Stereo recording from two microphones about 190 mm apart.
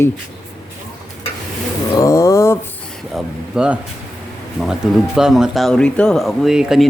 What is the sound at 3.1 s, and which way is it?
Speech, 5° right (ahead or behind).